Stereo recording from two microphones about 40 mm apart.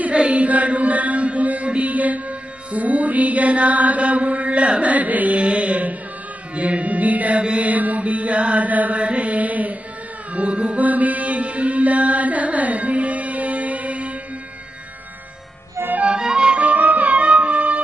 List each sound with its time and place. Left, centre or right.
0.1 s chant: right
1.7 s music: right
4.9 s mantra: right
10.3 s music: right
10.9 s mantra: right
16.2 s music: centre; by 17.8 s right